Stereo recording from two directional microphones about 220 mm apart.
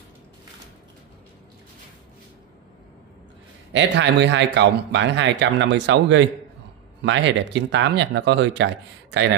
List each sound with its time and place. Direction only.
3.7 s a man's voice: 55° right (ahead or behind)